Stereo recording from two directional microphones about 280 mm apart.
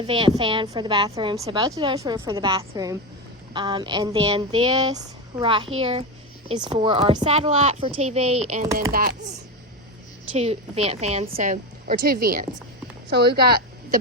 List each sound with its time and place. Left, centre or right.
0.0 s a woman's voice: centre
10.3 s a woman's voice: right